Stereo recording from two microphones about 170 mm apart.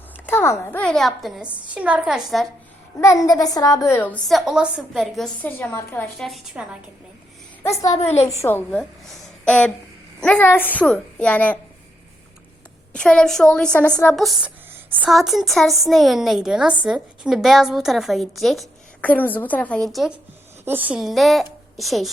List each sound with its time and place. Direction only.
0.3 s a woman's voice: 15° left (ahead or behind); by 2.5 s centre (ahead or behind)
3.0 s a woman's voice: 20° left (ahead or behind)
6.2 s a woman's voice: 5° right (ahead or behind)
7.6 s a woman's voice: 20° left (ahead or behind)
7.9 s a woman's voice: 40° left (ahead or behind)
8.3 s a woman's voice: 15° left (ahead or behind)
12.9 s a woman's voice: 5° left (ahead or behind)